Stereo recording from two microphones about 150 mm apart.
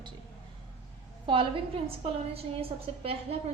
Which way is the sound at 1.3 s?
35° right (ahead or behind).